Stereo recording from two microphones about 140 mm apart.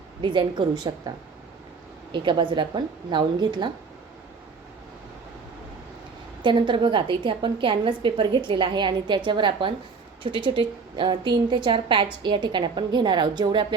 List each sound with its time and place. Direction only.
0.2 s a woman's voice: 35° right (ahead or behind)
2.1 s a woman's voice: 35° right (ahead or behind)
6.4 s a woman's voice: 35° right (ahead or behind)